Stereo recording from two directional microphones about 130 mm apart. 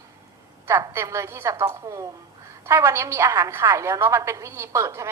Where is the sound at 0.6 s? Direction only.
20° right (ahead or behind).